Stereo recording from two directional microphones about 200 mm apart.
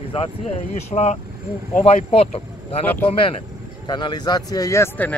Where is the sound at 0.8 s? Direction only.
35° left (ahead or behind).